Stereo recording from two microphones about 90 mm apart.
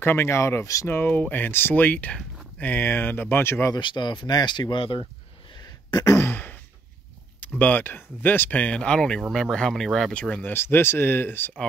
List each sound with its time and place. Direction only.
0.0 s speech: 25° left (ahead or behind)
0.8 s speech: 25° left (ahead or behind)
3.7 s speech: 60° left (ahead or behind)
5.9 s a sound: 45° left (ahead or behind)
6.1 s a sound: 25° left (ahead or behind)
7.3 s speech: 20° left (ahead or behind); by 10.1 s 5° left (ahead or behind)
10.3 s speech: 25° left (ahead or behind)